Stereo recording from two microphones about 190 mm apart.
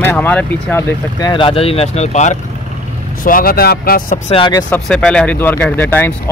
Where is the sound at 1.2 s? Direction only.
25° left (ahead or behind); by 4.2 s 45° left (ahead or behind).